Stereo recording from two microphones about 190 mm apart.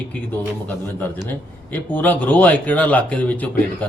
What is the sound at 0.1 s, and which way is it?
Speech, 10° left (ahead or behind).